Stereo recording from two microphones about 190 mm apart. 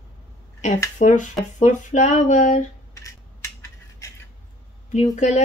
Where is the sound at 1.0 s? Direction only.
40° left (ahead or behind).